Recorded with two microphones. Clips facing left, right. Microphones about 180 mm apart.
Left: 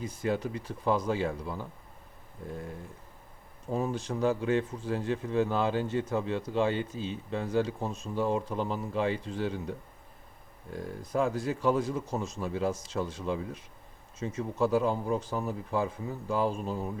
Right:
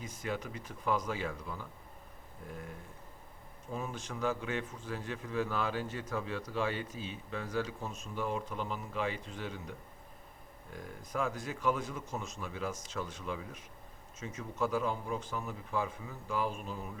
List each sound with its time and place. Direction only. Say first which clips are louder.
0.0 s a man's voice: left 8 dB; 35° left (ahead or behind)
3.7 s a man's voice: left 9 dB; 35° left (ahead or behind)